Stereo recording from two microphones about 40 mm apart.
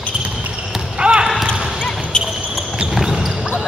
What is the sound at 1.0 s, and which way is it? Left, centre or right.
Basketball bounce, right.